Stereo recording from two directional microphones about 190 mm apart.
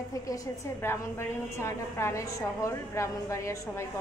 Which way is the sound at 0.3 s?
15° left (ahead or behind).